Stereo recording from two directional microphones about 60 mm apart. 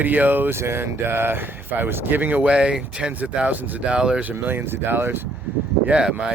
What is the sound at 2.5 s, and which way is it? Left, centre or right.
Speech, centre.